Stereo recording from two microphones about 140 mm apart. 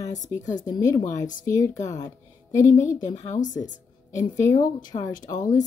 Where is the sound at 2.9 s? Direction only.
60° left (ahead or behind).